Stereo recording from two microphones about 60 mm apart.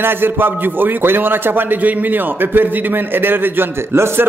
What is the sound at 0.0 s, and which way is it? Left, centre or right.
A man's voice, right.